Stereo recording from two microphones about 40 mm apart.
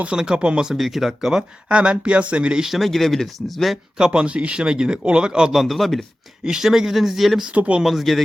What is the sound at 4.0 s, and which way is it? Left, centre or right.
Speech, right.